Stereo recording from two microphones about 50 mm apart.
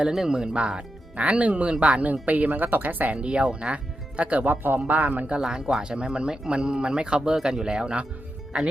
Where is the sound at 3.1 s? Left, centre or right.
Right.